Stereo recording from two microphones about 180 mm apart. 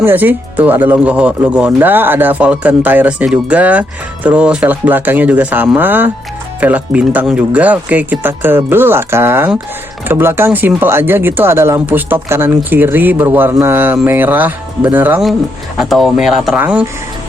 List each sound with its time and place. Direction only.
0.0 s speech: 10° right (ahead or behind)